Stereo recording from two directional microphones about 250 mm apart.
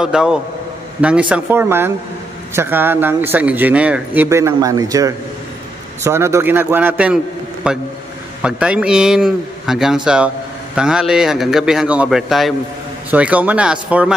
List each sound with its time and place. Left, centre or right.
0.0 s speech: centre